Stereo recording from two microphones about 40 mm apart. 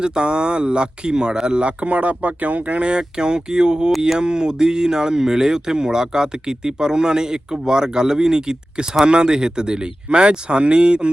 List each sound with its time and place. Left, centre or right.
0.0 s speech: right
2.8 s speech: right